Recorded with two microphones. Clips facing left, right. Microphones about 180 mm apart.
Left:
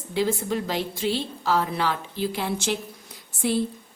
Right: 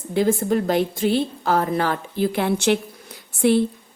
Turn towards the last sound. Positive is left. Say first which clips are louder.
# right 7 dB
turn(degrees=-65)  # may be behind; listen again after turning